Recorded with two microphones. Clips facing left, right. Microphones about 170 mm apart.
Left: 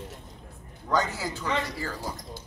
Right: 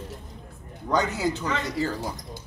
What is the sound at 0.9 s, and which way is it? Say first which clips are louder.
Speech: right 3 dB; 20° right (ahead or behind).